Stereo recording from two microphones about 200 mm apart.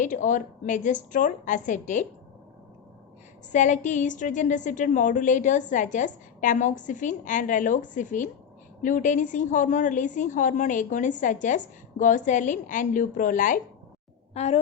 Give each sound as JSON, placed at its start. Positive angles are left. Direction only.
{"t": 0.0, "sound": "a woman's voice", "side_deg": 40}
{"t": 3.5, "sound": "a woman's voice", "side_deg": 40}